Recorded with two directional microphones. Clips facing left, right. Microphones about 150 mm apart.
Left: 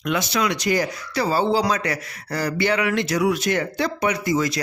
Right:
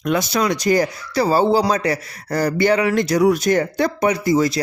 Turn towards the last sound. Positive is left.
turn(degrees=-35)  # may be behind; listen again after turning